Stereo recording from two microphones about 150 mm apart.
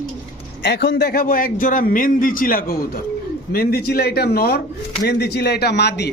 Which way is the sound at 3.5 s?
90° left.